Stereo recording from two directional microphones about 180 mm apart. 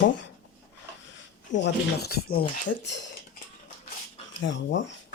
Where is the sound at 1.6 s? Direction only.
60° left (ahead or behind).